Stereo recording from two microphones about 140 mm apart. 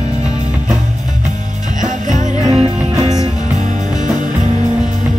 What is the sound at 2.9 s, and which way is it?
Music, 25° right (ahead or behind).